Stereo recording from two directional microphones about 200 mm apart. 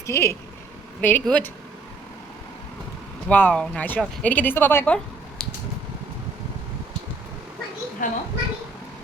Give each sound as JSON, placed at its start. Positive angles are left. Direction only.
{"t": 0.0, "sound": "speech", "side_deg": 15}
{"t": 3.2, "sound": "speech", "side_deg": 5}
{"t": 5.4, "sound": "a sound", "side_deg": 5}
{"t": 8.0, "sound": "speech", "side_deg": 40}